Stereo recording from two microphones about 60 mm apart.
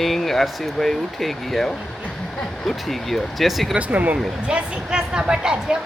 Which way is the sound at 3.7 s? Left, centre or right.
Right.